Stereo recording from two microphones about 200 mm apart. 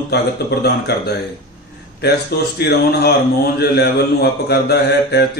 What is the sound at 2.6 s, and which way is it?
Speech, 55° left (ahead or behind).